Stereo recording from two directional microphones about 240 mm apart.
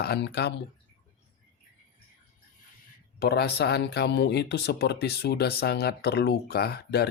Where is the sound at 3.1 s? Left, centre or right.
Left.